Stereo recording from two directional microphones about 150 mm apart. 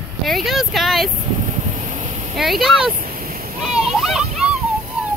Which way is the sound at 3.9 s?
Centre (ahead or behind).